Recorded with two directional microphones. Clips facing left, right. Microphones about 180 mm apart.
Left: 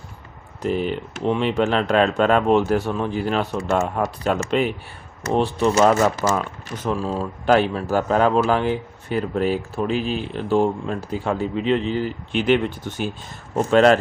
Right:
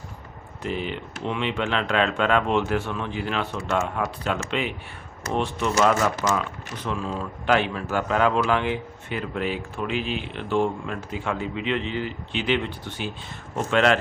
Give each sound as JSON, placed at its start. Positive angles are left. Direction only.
{"t": 0.6, "sound": "speech", "side_deg": 40}